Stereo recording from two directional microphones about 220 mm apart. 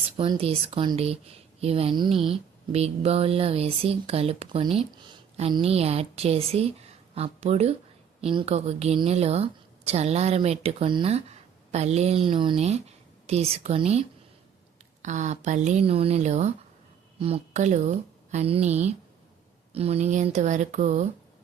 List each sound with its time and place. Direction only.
0.0 s speech: 25° right (ahead or behind)
15.0 s a woman's voice: 30° right (ahead or behind)